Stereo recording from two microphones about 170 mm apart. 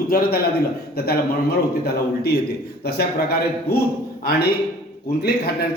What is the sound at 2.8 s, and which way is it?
Speech, 65° left (ahead or behind).